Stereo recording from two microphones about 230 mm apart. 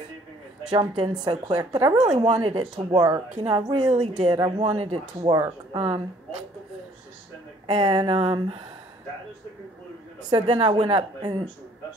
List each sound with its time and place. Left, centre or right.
0.7 s a woman's voice: right
2.0 s speech: right
7.6 s speech: right
10.3 s speech: right